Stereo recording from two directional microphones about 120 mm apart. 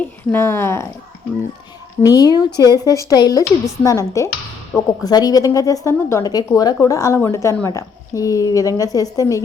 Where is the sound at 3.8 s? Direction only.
25° left (ahead or behind).